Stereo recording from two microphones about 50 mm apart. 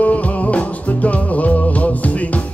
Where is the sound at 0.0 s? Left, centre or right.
Left.